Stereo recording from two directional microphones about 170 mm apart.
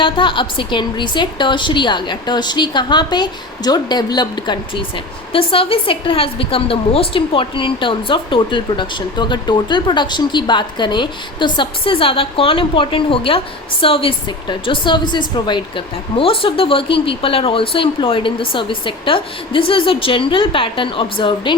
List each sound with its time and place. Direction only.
0.0 s a woman's voice: 30° left (ahead or behind)